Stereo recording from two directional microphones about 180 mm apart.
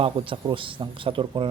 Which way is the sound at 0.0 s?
30° right (ahead or behind).